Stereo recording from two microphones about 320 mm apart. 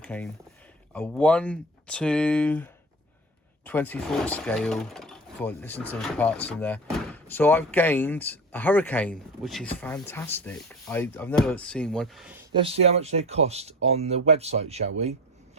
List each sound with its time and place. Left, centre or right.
0.0 s speech: centre
12.5 s speech: centre